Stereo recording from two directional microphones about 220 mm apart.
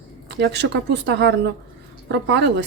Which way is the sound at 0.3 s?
50° right (ahead or behind).